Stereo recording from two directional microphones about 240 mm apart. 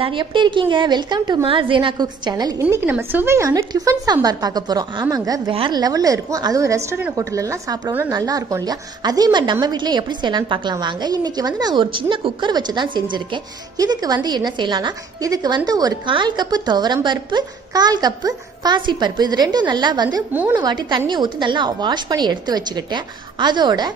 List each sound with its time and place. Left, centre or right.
0.0 s a woman's voice: centre